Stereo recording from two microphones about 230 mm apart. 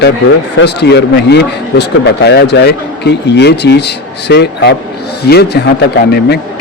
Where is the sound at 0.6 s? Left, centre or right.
Left.